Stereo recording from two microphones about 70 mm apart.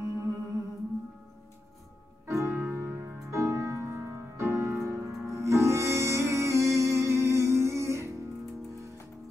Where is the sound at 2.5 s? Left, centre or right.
Right.